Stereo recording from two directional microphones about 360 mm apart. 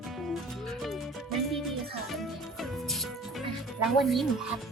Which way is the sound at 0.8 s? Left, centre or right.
Centre.